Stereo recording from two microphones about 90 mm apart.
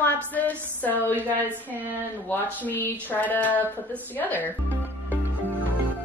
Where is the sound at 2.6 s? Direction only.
20° left (ahead or behind).